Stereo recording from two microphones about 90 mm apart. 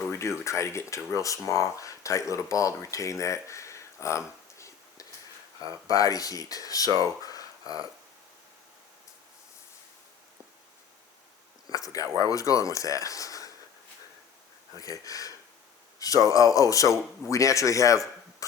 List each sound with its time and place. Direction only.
0.0 s speech: 30° left (ahead or behind)
7.0 s a sound: 40° left (ahead or behind)
11.7 s speech: 40° left (ahead or behind)
14.8 s speech: 40° left (ahead or behind)